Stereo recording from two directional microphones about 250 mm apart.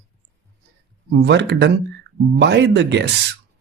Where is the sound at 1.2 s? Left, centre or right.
Right.